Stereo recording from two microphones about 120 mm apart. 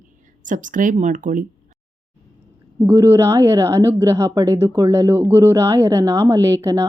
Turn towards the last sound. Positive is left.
turn(degrees=-25)  # may be behind; listen again after turning